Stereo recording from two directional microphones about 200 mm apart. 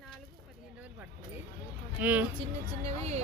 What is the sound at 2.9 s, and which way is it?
Speech, 35° right (ahead or behind).